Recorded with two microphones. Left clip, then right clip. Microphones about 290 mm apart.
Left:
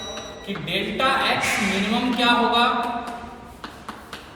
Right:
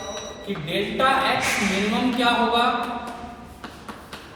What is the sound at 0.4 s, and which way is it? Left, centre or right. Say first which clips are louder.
Speech: even; centre.